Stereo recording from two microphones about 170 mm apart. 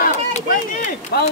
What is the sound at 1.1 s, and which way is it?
Speech, 70° left (ahead or behind).